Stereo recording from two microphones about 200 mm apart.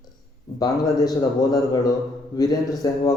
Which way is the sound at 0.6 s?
20° left (ahead or behind).